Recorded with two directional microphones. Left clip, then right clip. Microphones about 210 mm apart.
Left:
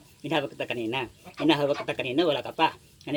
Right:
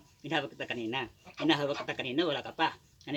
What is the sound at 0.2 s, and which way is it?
Speech, 10° right (ahead or behind).